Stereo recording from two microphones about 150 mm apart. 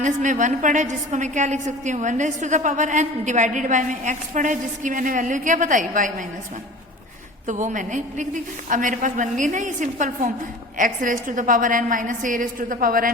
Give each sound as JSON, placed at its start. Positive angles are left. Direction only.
{"t": 0.0, "sound": "a woman's voice", "side_deg": -55}
{"t": 7.4, "sound": "a woman's voice", "side_deg": -55}